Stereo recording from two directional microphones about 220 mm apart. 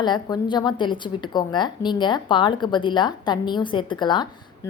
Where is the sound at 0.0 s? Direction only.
20° left (ahead or behind).